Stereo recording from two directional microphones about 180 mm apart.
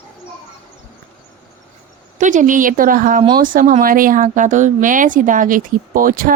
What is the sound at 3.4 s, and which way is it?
Speech, 45° right (ahead or behind).